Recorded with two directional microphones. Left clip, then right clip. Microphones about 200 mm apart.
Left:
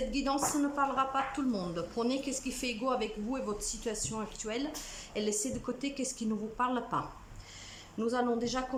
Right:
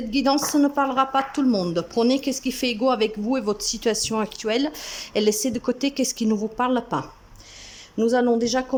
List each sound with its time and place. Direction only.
0.1 s speech: 40° right (ahead or behind)